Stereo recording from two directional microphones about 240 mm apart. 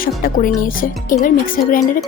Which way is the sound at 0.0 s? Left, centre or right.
Left.